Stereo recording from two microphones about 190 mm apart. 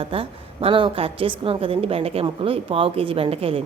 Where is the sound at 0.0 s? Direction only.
30° right (ahead or behind).